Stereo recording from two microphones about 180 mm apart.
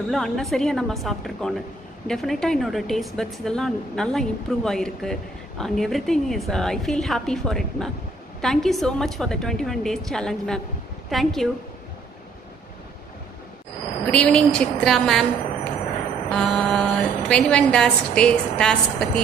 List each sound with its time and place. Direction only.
0.1 s a woman's voice: centre (ahead or behind)
14.1 s a woman's voice: 5° left (ahead or behind)
16.3 s a woman's voice: 5° left (ahead or behind)